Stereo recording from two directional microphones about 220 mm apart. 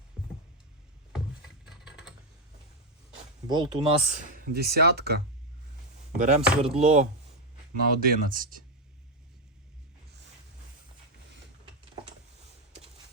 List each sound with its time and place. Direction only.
1.7 s typing: 5° right (ahead or behind)
3.5 s speech: 20° right (ahead or behind); by 5.2 s 45° right (ahead or behind)
6.1 s speech: 30° right (ahead or behind)